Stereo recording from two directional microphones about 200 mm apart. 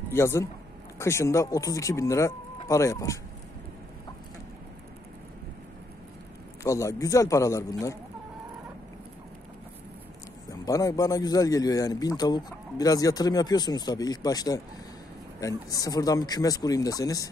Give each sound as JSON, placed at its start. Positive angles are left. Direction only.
{"t": 0.1, "sound": "speech", "side_deg": 15}
{"t": 6.6, "sound": "speech", "side_deg": 15}
{"t": 10.6, "sound": "a man's voice", "side_deg": 15}